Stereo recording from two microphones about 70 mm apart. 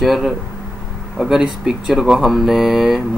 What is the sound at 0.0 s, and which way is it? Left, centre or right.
Speech, centre.